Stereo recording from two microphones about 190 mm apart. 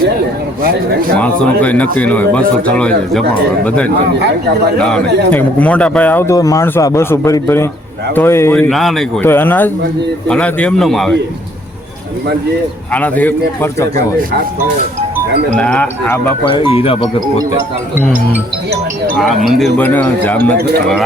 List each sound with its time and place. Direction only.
1.1 s speech: 5° left (ahead or behind)
4.8 s a man's voice: 5° left (ahead or behind)
8.7 s a man's voice: centre (ahead or behind)
12.9 s speech: 10° left (ahead or behind)
15.5 s speech: 5° left (ahead or behind)
16.5 s speech: 30° left (ahead or behind)
19.1 s speech: centre (ahead or behind)